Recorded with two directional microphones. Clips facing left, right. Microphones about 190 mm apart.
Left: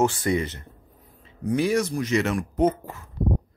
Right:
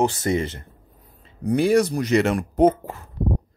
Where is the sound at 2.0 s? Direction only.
65° right (ahead or behind).